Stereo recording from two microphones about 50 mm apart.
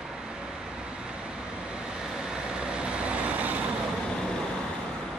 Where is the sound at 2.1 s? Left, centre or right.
Centre.